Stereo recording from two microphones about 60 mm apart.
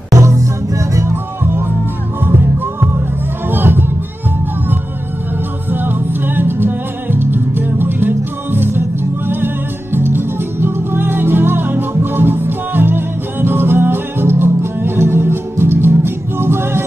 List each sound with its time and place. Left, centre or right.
0.2 s music: right
1.4 s music: right
3.4 s music: right
5.7 s music: right
9.9 s music: right